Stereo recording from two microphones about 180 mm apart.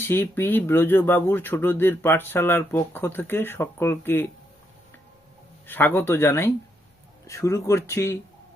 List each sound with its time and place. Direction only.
0.0 s speech: 10° left (ahead or behind)
5.6 s speech: 10° left (ahead or behind)